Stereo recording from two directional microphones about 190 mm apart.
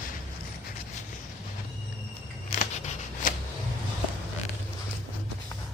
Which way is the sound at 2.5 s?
35° left (ahead or behind).